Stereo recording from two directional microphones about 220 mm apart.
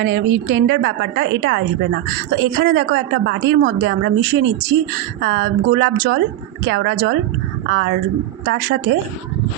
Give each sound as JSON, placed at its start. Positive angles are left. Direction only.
{"t": 0.0, "sound": "a woman's voice", "side_deg": -55}